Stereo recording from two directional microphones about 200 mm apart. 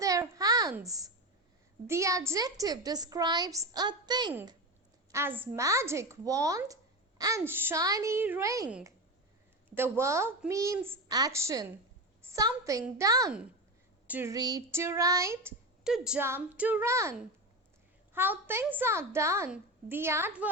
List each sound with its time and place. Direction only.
0.0 s a sound: 15° right (ahead or behind)
1.9 s a woman's voice: 15° right (ahead or behind)
5.1 s a woman's voice: 10° right (ahead or behind)
15.8 s a woman's voice: 5° right (ahead or behind)